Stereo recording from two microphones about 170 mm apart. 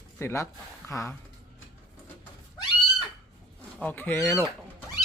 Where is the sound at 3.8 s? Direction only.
10° left (ahead or behind).